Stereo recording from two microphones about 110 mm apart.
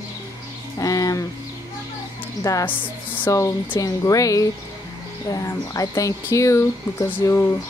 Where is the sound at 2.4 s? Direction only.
30° left (ahead or behind).